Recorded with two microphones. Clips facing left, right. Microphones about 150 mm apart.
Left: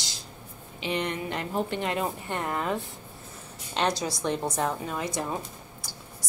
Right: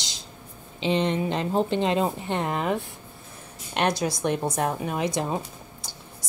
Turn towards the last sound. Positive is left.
turn(degrees=-20)  # may be behind; listen again after turning